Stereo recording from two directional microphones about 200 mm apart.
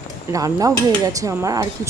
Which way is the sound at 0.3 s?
15° right (ahead or behind).